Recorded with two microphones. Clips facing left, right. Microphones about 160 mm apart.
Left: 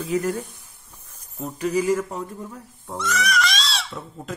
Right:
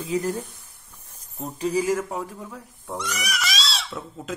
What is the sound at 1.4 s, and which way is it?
Speech, 30° right (ahead or behind).